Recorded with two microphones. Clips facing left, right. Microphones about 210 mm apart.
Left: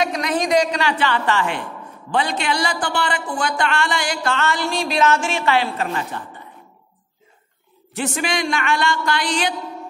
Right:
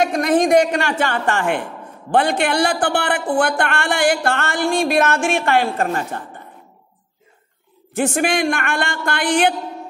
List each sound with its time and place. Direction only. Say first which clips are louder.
0.0 s a woman's voice: right 5 dB; 50° right (ahead or behind)
7.9 s a woman's voice: right 5 dB; 50° right (ahead or behind)